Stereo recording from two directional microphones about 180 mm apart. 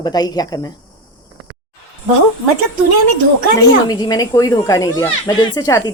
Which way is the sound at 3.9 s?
20° left (ahead or behind).